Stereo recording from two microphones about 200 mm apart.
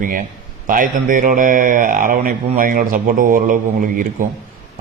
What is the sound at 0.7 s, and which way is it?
A man's voice, 45° right (ahead or behind).